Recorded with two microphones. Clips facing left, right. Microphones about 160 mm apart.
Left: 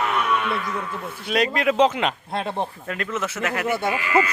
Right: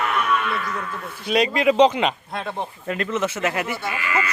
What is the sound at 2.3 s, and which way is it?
Speech, 20° left (ahead or behind).